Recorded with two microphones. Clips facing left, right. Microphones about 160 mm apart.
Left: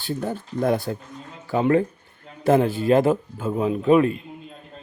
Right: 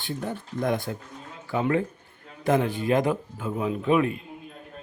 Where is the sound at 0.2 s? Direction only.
40° left (ahead or behind).